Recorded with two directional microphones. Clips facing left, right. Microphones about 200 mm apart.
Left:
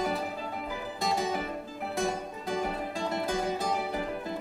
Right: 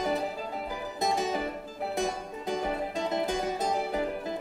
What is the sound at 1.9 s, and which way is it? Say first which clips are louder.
Music: left 1 dB; 20° right (ahead or behind).